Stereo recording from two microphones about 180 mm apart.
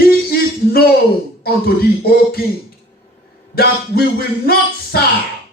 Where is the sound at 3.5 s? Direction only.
60° left (ahead or behind).